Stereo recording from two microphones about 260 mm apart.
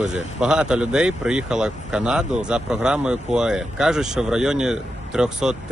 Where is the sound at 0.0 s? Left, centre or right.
Centre.